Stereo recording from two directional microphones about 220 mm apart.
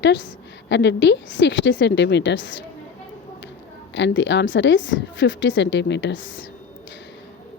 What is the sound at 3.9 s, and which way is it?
A woman's voice, 55° left (ahead or behind).